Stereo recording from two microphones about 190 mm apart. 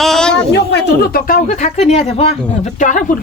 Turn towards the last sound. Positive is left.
turn(degrees=45)  # may be behind; listen again after turning